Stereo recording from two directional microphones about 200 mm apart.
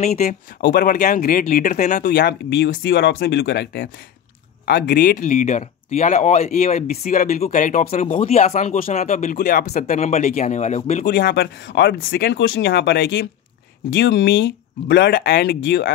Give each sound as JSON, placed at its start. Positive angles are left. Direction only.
{"t": 0.1, "sound": "speech", "side_deg": 45}
{"t": 11.1, "sound": "speech", "side_deg": 55}